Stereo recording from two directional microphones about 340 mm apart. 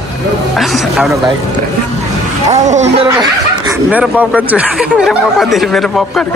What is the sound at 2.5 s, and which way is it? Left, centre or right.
Speech, centre.